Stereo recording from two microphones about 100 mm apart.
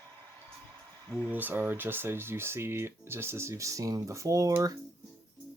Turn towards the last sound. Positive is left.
turn(degrees=-35)  # may be behind; listen again after turning